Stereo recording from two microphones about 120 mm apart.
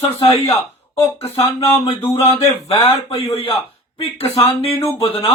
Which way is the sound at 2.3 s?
55° left (ahead or behind).